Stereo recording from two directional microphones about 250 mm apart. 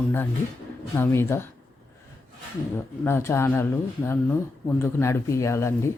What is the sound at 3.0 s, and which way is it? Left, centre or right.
Speech, centre.